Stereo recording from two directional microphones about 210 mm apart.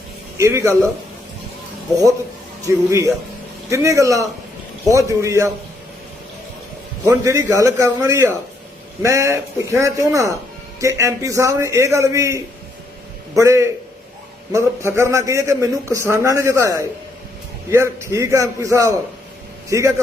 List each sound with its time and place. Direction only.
0.3 s a man's voice: 15° right (ahead or behind)
2.6 s a man's voice: 15° right (ahead or behind)
7.0 s a man's voice: 15° right (ahead or behind)